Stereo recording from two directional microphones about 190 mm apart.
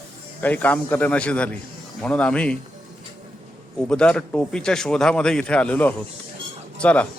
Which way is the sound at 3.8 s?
5° left (ahead or behind).